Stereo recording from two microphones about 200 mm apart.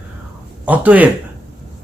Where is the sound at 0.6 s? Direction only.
5° right (ahead or behind).